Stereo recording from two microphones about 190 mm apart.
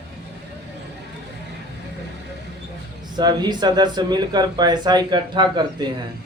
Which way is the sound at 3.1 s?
20° right (ahead or behind).